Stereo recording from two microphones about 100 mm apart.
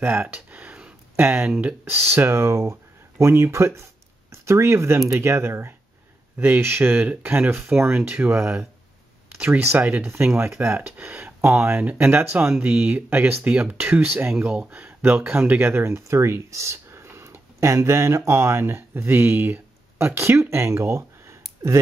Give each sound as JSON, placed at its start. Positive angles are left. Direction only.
{"t": 0.0, "sound": "a sound", "side_deg": -20}
{"t": 1.2, "sound": "speech", "side_deg": -25}
{"t": 1.5, "sound": "speech", "side_deg": -15}
{"t": 1.9, "sound": "speech", "side_deg": -25}
{"t": 9.7, "sound": "speech", "side_deg": -20}